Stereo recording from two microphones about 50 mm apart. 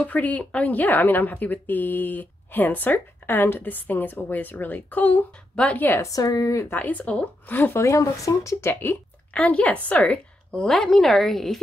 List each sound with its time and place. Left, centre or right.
0.0 s a woman's voice: left
5.9 s speech: left
6.7 s a woman's voice: left
7.5 s speech: left
7.8 s speech: left
9.3 s a woman's voice: left
10.5 s a woman's voice: centre